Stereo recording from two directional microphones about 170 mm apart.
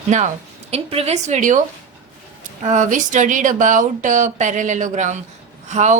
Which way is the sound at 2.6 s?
45° right (ahead or behind).